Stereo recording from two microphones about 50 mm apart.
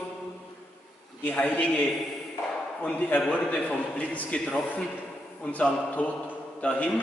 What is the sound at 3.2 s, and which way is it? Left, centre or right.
A man's voice, left.